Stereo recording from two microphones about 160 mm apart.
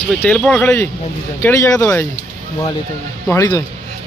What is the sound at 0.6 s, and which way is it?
Speech, 15° left (ahead or behind).